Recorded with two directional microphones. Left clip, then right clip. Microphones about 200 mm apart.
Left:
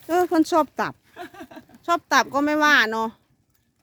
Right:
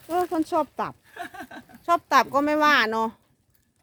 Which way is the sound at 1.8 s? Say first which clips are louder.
Even; 15° left (ahead or behind).